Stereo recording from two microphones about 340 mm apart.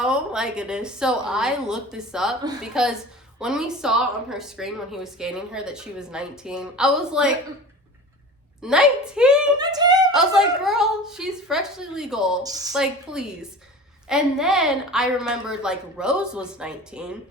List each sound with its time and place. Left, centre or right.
0.0 s a woman's voice: centre
8.6 s a woman's voice: centre
10.1 s a woman's voice: centre